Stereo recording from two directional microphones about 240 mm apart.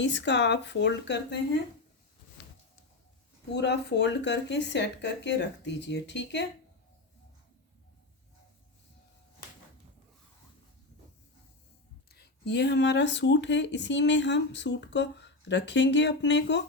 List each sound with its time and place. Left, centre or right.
0.0 s speech: left
3.5 s speech: left
12.1 s speech: left